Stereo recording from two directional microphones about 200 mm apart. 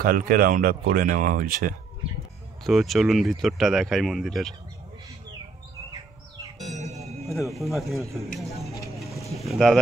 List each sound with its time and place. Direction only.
0.0 s speech: 45° right (ahead or behind)
2.6 s speech: centre (ahead or behind)
6.9 s music: 30° right (ahead or behind)
7.3 s speech: centre (ahead or behind)
8.9 s vehicle: centre (ahead or behind)
9.4 s speech: centre (ahead or behind)